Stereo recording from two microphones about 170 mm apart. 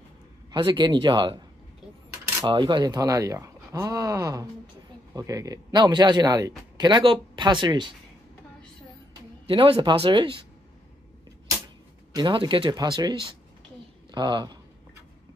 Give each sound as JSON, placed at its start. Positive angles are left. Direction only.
{"t": 0.5, "sound": "speech", "side_deg": -25}
{"t": 2.4, "sound": "speech", "side_deg": -25}
{"t": 9.5, "sound": "speech", "side_deg": -30}
{"t": 12.1, "sound": "speech", "side_deg": -25}